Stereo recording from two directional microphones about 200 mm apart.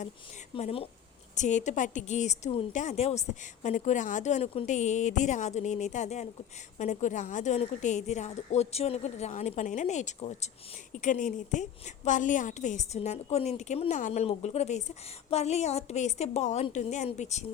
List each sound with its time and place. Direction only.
0.5 s a woman's voice: 30° left (ahead or behind)